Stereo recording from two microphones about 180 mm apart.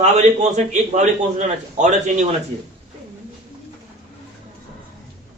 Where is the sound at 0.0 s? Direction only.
40° right (ahead or behind).